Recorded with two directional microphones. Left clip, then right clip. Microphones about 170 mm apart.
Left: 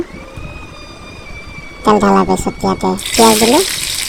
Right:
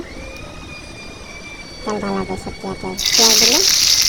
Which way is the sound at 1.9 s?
55° left (ahead or behind).